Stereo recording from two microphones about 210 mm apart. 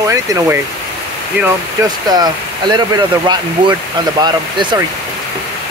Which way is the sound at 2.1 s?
20° right (ahead or behind).